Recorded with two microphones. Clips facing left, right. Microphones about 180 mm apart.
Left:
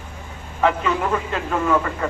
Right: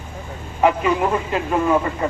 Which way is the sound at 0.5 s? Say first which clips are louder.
Right 3 dB; 15° right (ahead or behind).